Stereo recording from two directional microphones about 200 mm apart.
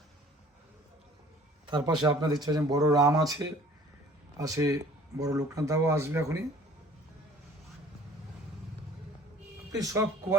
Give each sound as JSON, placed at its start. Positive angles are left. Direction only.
{"t": 1.6, "sound": "speech", "side_deg": -20}
{"t": 9.7, "sound": "speech", "side_deg": -15}